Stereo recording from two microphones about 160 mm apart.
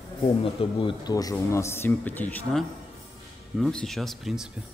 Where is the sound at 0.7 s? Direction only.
35° left (ahead or behind).